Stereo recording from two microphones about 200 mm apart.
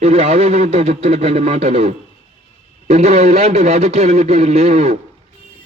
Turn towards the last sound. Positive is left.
turn(degrees=-35)  # may be behind; listen again after turning